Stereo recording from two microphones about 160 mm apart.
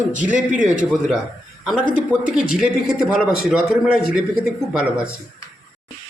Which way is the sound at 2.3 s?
5° right (ahead or behind).